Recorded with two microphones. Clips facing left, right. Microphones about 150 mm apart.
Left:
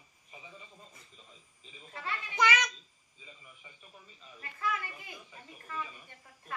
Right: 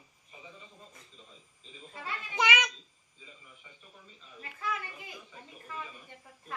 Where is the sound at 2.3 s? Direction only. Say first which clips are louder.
Even; 20° right (ahead or behind).